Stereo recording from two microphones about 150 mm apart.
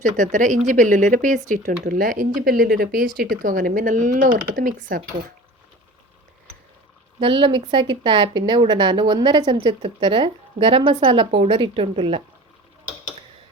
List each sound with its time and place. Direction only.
0.0 s speech: 55° right (ahead or behind)
7.2 s speech: 35° right (ahead or behind)